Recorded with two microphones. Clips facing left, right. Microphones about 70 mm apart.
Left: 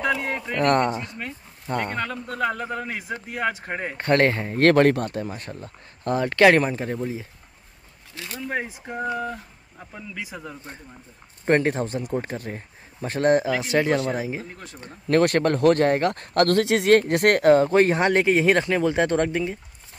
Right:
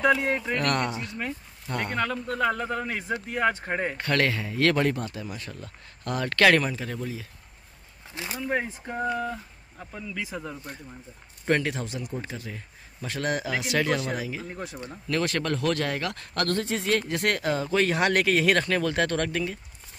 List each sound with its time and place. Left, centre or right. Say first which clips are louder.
0.0 s speech: right 2 dB; centre
0.6 s speech: left 6 dB; left
0.9 s speech: left 1 dB; centre
1.7 s speech: left 4 dB; left
2.0 s speech: even; centre
4.0 s speech: left 9 dB; left
6.2 s speech: left 4 dB; left
8.1 s speech: right 1 dB; centre
8.4 s speech: even; centre
11.4 s speech: left 5 dB; left
14.5 s speech: right 5 dB; centre
15.0 s speech: left 8 dB; left
16.5 s speech: left 9 dB; left
17.8 s speech: left 4 dB; left